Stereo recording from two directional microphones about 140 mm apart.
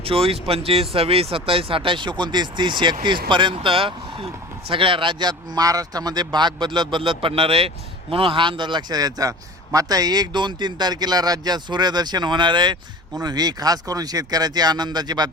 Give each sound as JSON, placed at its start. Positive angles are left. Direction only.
{"t": 0.0, "sound": "speech", "side_deg": -40}